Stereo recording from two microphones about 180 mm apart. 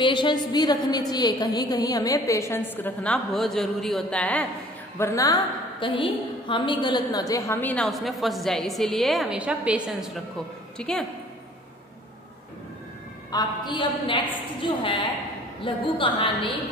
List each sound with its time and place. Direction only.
0.0 s a woman's voice: 25° left (ahead or behind); by 11.1 s 5° left (ahead or behind)
13.3 s a woman's voice: 20° left (ahead or behind)